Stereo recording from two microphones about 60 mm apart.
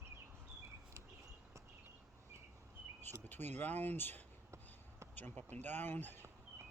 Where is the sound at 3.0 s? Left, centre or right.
Left.